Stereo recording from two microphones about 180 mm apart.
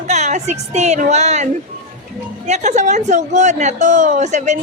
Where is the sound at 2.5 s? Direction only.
40° right (ahead or behind).